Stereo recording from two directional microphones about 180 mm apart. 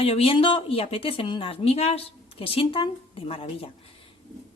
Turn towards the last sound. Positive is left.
turn(degrees=30)  # may be behind; listen again after turning